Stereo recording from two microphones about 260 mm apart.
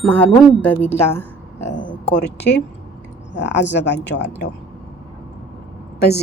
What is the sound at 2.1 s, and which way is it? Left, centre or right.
Speech, left.